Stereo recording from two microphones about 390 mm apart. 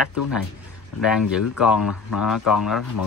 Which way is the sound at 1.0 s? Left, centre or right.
Centre.